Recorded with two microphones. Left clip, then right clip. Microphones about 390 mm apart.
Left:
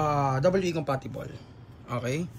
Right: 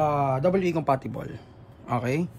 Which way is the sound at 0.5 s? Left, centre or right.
Centre.